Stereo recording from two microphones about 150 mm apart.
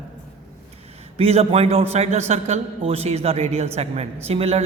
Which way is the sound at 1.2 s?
45° right (ahead or behind).